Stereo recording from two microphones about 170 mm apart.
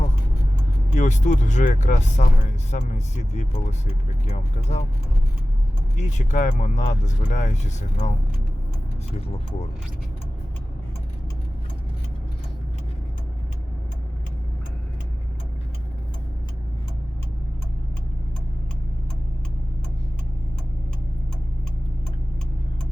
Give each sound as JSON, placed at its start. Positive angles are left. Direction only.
{"t": 0.9, "sound": "speech", "side_deg": 45}
{"t": 6.0, "sound": "speech", "side_deg": 45}